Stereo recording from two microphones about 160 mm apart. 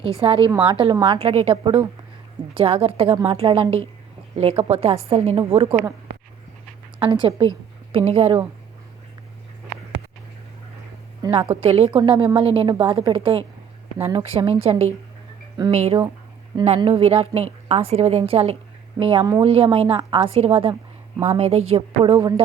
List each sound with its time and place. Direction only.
0.2 s a woman's voice: 35° right (ahead or behind)
7.0 s a woman's voice: 35° right (ahead or behind)
11.2 s a woman's voice: 35° right (ahead or behind)